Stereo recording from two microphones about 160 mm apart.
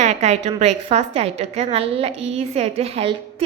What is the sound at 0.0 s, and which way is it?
A woman's voice, 45° right (ahead or behind).